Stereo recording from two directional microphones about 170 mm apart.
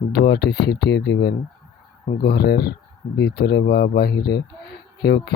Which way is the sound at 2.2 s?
70° left (ahead or behind).